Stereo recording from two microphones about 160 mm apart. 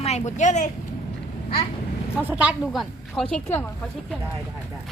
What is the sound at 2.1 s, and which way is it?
Speech, 10° right (ahead or behind).